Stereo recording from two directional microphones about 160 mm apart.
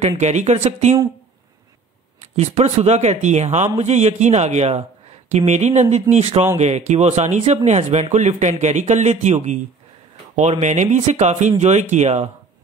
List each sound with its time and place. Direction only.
0.2 s speech: 45° right (ahead or behind)
2.1 s speech: 45° right (ahead or behind)